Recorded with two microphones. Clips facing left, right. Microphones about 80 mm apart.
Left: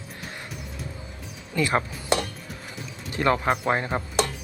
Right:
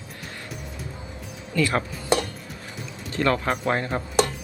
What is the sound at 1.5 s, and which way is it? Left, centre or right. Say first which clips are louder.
Speech: even; left.